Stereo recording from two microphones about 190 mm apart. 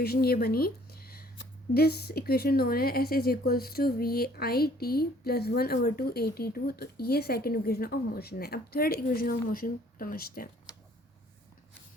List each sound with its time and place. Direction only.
0.0 s speech: 55° left (ahead or behind)